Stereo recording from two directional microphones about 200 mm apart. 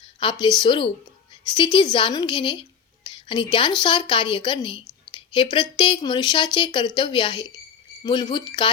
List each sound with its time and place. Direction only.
0.2 s a woman's voice: 25° left (ahead or behind)